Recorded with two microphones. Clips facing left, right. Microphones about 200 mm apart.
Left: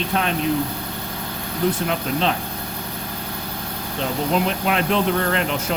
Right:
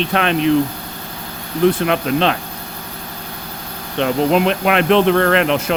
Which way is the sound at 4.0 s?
75° right (ahead or behind).